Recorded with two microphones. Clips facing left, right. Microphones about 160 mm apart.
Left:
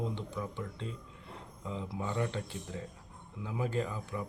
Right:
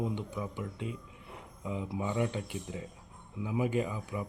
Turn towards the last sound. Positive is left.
turn(degrees=-15)  # may be behind; listen again after turning